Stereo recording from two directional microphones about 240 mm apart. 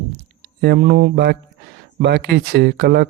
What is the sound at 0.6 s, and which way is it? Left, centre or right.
A man's voice, right.